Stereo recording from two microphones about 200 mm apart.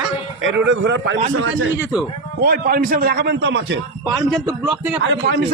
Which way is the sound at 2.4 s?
50° right (ahead or behind).